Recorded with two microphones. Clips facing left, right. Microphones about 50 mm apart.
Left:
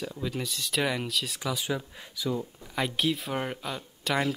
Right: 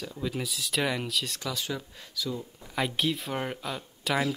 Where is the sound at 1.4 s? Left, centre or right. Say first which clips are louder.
Left 3 dB; centre.